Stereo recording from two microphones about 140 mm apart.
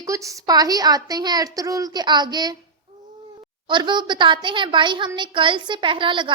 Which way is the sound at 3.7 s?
35° right (ahead or behind).